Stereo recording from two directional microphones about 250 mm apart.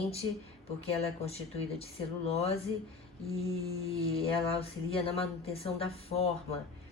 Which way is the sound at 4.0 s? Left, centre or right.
Left.